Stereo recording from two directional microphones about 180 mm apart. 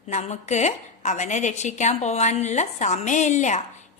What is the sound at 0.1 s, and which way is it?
A woman's voice, 40° left (ahead or behind).